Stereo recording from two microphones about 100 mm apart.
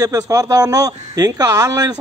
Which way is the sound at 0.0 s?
35° right (ahead or behind).